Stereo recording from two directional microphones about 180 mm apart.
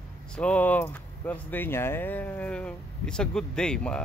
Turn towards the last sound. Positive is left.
turn(degrees=5)  # may be behind; listen again after turning